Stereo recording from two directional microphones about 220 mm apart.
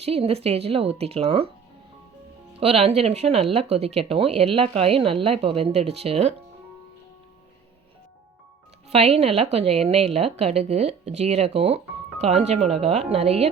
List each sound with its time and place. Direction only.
0.0 s a woman's voice: 25° right (ahead or behind)
2.5 s a woman's voice: 25° right (ahead or behind)
8.9 s a woman's voice: 30° right (ahead or behind)